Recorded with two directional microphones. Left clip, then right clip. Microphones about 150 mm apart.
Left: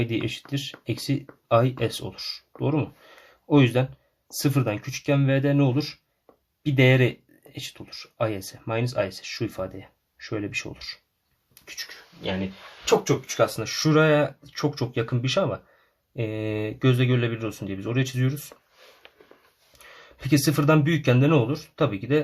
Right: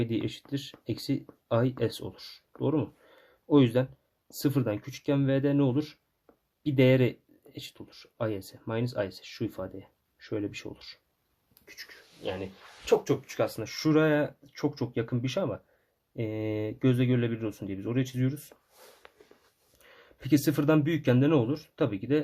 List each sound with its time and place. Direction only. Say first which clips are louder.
0.0 s speech: left 4 dB; 30° right (ahead or behind)
12.8 s speech: left 4 dB; 40° right (ahead or behind)
19.8 s speech: left 7 dB; 30° right (ahead or behind)